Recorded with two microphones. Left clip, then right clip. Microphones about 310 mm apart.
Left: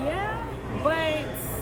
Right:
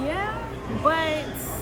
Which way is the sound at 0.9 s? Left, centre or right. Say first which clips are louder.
Right 2 dB; centre.